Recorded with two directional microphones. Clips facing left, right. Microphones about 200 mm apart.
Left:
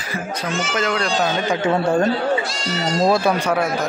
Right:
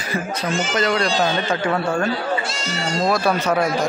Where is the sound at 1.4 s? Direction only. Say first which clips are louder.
Left 2 dB; 20° left (ahead or behind).